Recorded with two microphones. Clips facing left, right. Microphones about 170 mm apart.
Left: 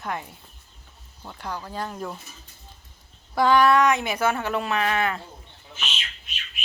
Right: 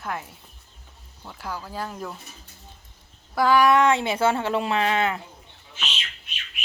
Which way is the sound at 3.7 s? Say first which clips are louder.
Right 1 dB; 25° right (ahead or behind).